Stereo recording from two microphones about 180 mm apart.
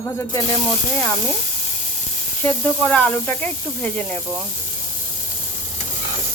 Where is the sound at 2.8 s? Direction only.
10° left (ahead or behind).